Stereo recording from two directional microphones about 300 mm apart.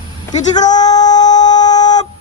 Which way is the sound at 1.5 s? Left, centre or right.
Left.